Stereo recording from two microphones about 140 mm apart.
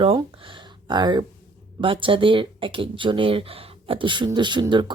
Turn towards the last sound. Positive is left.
turn(degrees=-35)  # may be behind; listen again after turning